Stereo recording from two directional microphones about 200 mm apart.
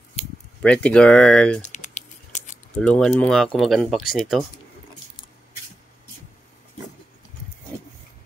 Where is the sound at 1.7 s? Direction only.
40° left (ahead or behind).